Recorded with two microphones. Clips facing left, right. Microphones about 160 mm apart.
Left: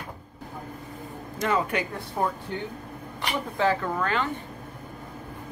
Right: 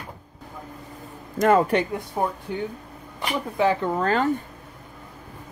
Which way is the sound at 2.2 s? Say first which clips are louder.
Right 1 dB; 15° right (ahead or behind).